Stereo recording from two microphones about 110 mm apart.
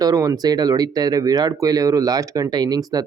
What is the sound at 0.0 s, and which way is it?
Speech, 35° right (ahead or behind).